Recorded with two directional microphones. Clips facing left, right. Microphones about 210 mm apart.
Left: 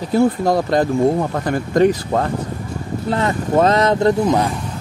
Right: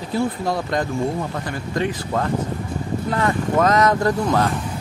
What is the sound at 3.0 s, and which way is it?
Speech, 25° left (ahead or behind).